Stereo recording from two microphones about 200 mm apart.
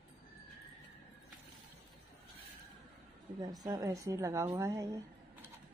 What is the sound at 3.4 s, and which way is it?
A woman's voice, 20° right (ahead or behind).